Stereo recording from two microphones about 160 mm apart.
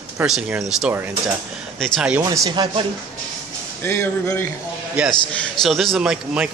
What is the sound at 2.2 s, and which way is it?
Speech, 25° right (ahead or behind).